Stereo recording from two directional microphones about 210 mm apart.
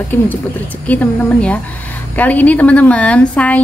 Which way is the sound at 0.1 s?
10° left (ahead or behind).